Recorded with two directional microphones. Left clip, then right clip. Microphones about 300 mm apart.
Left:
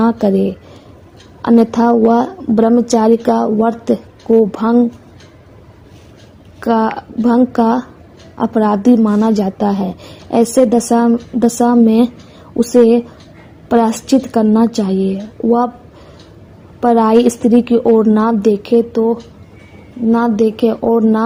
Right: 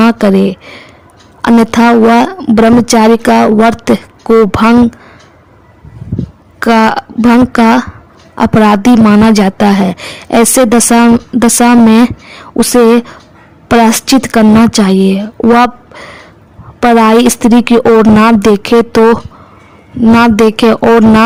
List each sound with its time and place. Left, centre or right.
0.0 s a woman's voice: right
6.6 s a woman's voice: right
20.1 s a woman's voice: right